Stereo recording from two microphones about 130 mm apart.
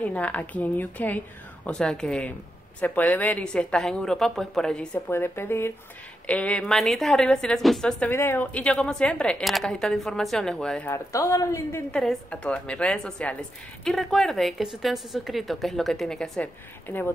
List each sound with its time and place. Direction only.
0.0 s a woman's voice: 10° left (ahead or behind)
8.1 s a woman's voice: 15° left (ahead or behind)
10.9 s a woman's voice: 25° left (ahead or behind)
11.9 s a woman's voice: 5° left (ahead or behind)